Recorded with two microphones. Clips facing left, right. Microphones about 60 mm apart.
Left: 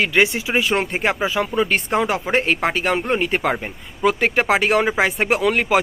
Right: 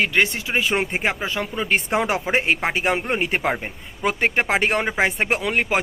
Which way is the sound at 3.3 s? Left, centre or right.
Centre.